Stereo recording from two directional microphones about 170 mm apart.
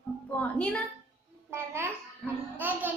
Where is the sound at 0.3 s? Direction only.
10° left (ahead or behind).